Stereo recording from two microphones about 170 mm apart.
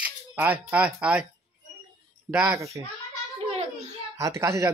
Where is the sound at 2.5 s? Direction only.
20° right (ahead or behind).